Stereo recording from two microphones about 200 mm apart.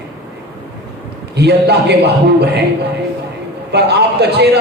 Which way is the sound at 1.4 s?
55° right (ahead or behind).